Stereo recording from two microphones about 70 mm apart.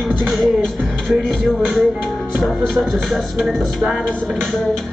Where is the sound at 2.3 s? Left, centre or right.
Centre.